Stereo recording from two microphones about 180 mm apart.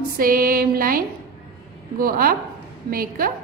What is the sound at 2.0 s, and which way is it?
A woman's voice, 55° right (ahead or behind).